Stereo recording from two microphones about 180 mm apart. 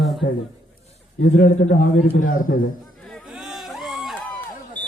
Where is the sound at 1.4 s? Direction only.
45° left (ahead or behind).